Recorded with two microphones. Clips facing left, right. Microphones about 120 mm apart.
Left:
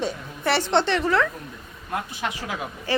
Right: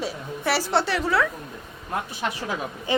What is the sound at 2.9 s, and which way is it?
Speech, 20° right (ahead or behind).